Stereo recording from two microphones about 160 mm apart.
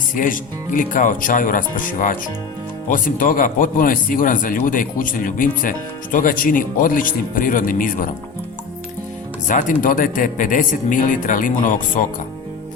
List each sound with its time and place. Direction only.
0.1 s speech: 55° left (ahead or behind)
9.5 s speech: 55° left (ahead or behind)